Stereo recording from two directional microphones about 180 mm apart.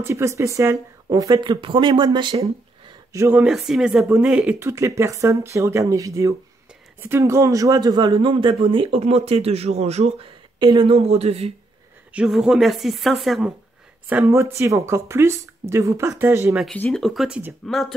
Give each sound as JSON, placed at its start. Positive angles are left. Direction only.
{"t": 0.0, "sound": "speech", "side_deg": -15}
{"t": 3.1, "sound": "speech", "side_deg": -15}
{"t": 12.1, "sound": "speech", "side_deg": -5}
{"t": 14.0, "sound": "speech", "side_deg": -10}
{"t": 16.5, "sound": "speech", "side_deg": 5}